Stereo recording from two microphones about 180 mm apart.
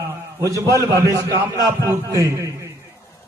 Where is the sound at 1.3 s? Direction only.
20° right (ahead or behind).